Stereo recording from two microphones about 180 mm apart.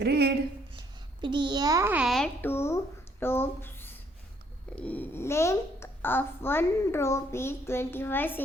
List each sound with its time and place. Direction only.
0.0 s speech: 65° right (ahead or behind)
1.2 s a child's voice: 25° right (ahead or behind); by 8.4 s 10° left (ahead or behind)